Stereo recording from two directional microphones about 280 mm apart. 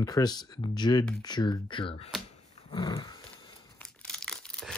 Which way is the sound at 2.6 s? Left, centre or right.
Centre.